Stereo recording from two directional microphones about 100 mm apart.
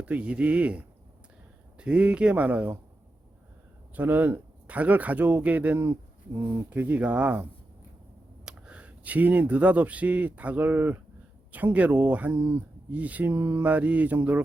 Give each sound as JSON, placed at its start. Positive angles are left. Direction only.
{"t": 0.0, "sound": "speech", "side_deg": -15}
{"t": 3.9, "sound": "speech", "side_deg": -20}
{"t": 8.4, "sound": "speech", "side_deg": -10}
{"t": 13.3, "sound": "mantra", "side_deg": -25}
{"t": 13.7, "sound": "speech", "side_deg": -15}